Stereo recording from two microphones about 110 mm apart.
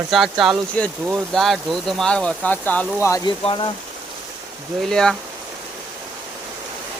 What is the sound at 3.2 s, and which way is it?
Speech, 45° left (ahead or behind).